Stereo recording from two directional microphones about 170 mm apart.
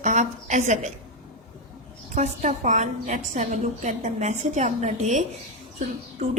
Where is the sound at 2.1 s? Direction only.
45° right (ahead or behind).